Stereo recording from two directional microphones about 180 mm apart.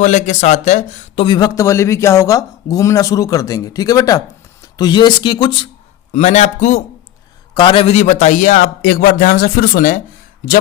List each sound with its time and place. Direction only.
0.0 s speech: 40° left (ahead or behind); by 5.6 s 25° left (ahead or behind)
6.1 s a man's voice: 40° left (ahead or behind)
7.5 s a man's voice: 25° left (ahead or behind); by 10.0 s 50° left (ahead or behind)